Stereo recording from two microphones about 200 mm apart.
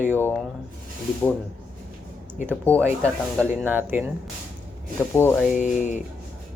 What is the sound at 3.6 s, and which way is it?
Speech, 10° right (ahead or behind).